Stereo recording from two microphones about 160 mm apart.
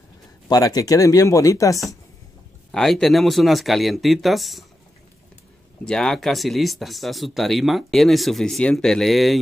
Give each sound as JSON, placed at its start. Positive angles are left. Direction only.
{"t": 0.5, "sound": "speech", "side_deg": 25}
{"t": 2.7, "sound": "speech", "side_deg": 0}
{"t": 5.9, "sound": "speech", "side_deg": 0}